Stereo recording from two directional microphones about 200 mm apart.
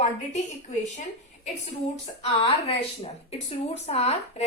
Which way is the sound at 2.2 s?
30° left (ahead or behind).